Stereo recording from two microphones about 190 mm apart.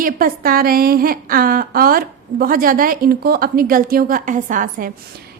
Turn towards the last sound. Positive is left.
turn(degrees=-45)  # may be behind; listen again after turning